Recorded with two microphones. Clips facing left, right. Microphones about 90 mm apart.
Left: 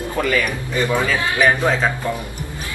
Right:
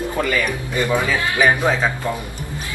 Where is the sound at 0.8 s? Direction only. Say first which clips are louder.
Even; 15° right (ahead or behind).